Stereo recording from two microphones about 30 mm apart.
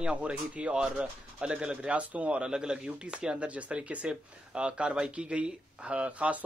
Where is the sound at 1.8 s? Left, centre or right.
Right.